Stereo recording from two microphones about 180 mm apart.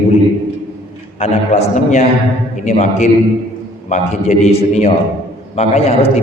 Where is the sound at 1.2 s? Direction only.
40° left (ahead or behind).